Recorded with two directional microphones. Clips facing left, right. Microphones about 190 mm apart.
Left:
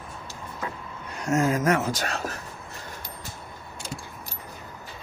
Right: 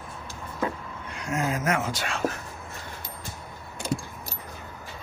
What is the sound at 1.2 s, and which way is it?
Speech, 45° left (ahead or behind).